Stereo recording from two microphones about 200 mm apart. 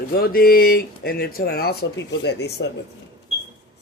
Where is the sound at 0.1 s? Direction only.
50° left (ahead or behind).